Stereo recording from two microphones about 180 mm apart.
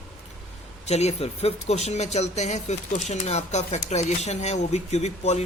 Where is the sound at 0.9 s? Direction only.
35° left (ahead or behind).